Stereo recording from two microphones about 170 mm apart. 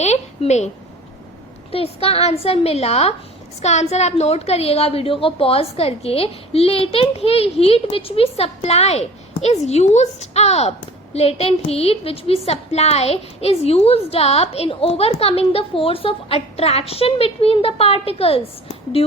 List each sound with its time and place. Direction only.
0.0 s a woman's voice: 40° left (ahead or behind)
1.7 s a woman's voice: 35° left (ahead or behind)